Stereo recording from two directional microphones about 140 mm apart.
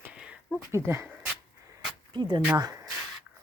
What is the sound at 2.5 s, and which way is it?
Speech, 30° right (ahead or behind).